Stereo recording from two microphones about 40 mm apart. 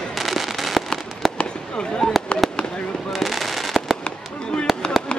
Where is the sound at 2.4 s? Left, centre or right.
Centre.